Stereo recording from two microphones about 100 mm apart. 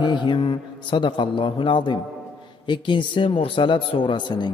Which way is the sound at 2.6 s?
50° left (ahead or behind).